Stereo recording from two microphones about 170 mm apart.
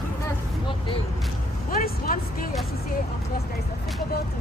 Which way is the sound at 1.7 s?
60° left (ahead or behind).